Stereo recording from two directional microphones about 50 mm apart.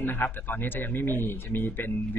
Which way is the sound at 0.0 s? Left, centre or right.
Left.